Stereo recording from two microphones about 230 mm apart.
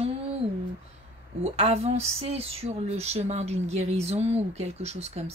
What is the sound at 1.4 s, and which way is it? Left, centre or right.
Speech, right.